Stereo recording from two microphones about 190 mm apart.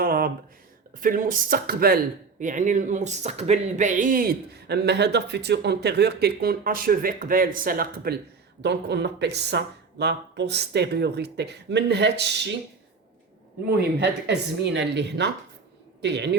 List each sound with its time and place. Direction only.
0.0 s a sound: 50° right (ahead or behind)
1.0 s speech: 45° right (ahead or behind)
2.4 s speech: 40° right (ahead or behind)
8.6 s speech: 65° right (ahead or behind)
13.7 s speech: 60° right (ahead or behind)